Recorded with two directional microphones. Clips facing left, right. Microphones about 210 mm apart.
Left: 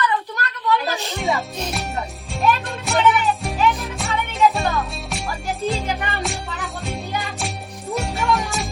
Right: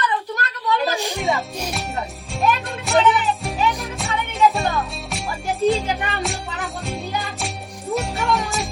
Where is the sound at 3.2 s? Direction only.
Centre (ahead or behind).